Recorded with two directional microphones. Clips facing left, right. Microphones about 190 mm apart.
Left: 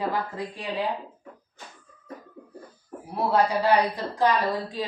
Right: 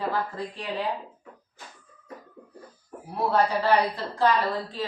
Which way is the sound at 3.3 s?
15° left (ahead or behind).